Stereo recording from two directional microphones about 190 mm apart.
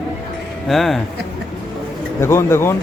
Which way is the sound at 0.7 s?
Centre (ahead or behind).